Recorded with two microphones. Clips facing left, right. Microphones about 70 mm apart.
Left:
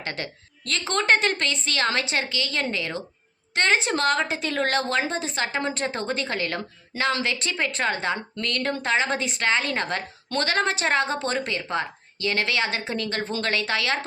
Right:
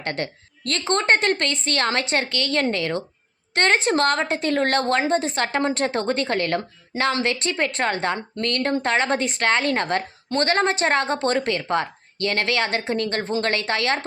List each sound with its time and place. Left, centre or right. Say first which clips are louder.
0.0 s a woman's voice: right 5 dB; right